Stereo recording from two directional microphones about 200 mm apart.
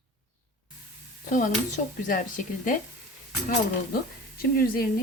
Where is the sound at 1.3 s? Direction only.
40° left (ahead or behind).